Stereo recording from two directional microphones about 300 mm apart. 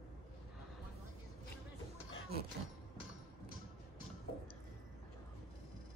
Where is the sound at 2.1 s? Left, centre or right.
Left.